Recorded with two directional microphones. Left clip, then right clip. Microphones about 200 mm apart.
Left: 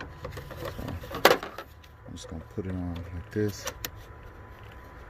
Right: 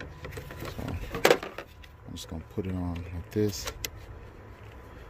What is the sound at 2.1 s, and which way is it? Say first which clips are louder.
Speech: right 1 dB; 10° right (ahead or behind).